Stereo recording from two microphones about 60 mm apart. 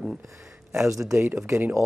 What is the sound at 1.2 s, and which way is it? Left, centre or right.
Speech, right.